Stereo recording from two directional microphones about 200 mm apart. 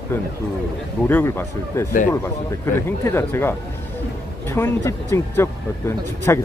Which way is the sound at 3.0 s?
10° left (ahead or behind).